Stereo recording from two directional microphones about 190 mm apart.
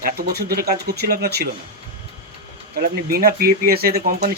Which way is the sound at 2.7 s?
55° right (ahead or behind).